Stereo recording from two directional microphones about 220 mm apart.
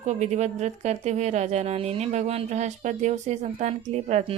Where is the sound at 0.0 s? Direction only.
30° right (ahead or behind).